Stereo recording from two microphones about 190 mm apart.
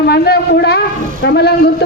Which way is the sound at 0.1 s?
55° left (ahead or behind).